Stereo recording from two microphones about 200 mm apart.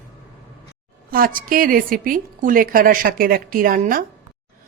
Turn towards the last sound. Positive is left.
turn(degrees=-45)  # may be behind; listen again after turning